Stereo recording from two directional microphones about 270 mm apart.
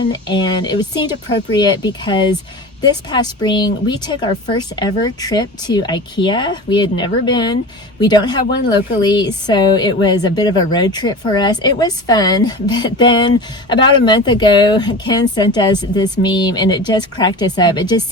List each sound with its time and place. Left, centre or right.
0.1 s a woman's voice: centre